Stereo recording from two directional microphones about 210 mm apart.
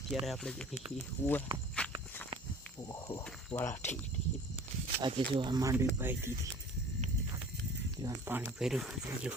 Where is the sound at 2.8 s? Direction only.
20° left (ahead or behind).